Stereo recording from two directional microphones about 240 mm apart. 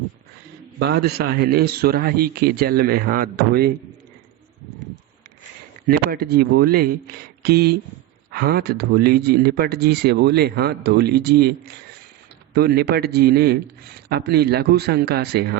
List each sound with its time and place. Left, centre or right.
0.8 s speech: right
5.9 s speech: right